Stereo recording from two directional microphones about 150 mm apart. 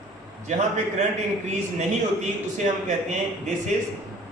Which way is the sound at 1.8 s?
50° right (ahead or behind).